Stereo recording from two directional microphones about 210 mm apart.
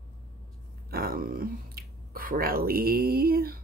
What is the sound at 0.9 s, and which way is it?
Speech, 45° right (ahead or behind).